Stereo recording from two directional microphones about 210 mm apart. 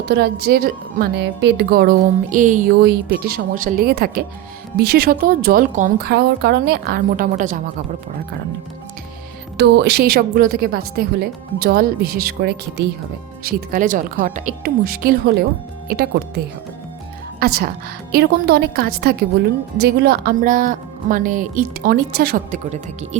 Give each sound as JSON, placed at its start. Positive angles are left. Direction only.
{"t": 0.0, "sound": "a woman's voice", "side_deg": -55}
{"t": 9.6, "sound": "a woman's voice", "side_deg": -55}
{"t": 17.4, "sound": "a woman's voice", "side_deg": -45}